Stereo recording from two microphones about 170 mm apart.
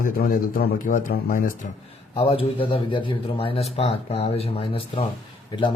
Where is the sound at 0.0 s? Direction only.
55° left (ahead or behind).